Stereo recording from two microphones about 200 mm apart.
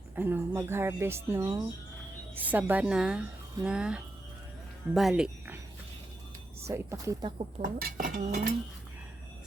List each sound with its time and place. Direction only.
0.2 s speech: 10° right (ahead or behind)
6.7 s speech: 15° right (ahead or behind)
7.6 s speech: 45° right (ahead or behind)